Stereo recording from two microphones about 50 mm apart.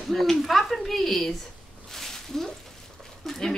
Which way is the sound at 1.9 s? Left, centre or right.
Centre.